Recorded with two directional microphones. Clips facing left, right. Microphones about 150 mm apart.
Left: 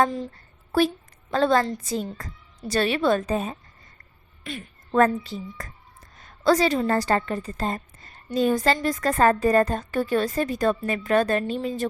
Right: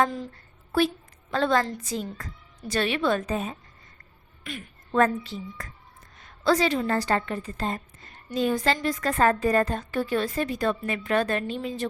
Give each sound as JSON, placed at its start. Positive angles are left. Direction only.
{"t": 0.7, "sound": "a woman's voice", "side_deg": 40}
{"t": 5.0, "sound": "a woman's voice", "side_deg": 40}